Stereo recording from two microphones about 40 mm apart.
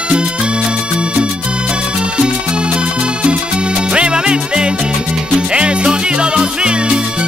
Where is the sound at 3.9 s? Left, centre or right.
Right.